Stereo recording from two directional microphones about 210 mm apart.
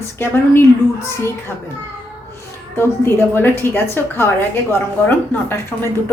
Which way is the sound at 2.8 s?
10° left (ahead or behind).